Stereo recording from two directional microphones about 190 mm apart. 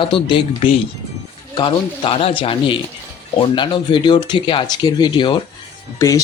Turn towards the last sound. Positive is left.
turn(degrees=15)  # may be behind; listen again after turning